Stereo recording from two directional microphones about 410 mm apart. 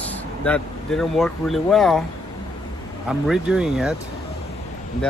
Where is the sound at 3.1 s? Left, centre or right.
Centre.